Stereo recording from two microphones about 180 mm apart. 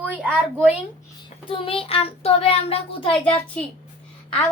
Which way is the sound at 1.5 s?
30° left (ahead or behind).